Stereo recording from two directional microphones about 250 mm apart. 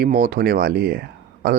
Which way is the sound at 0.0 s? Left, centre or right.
Right.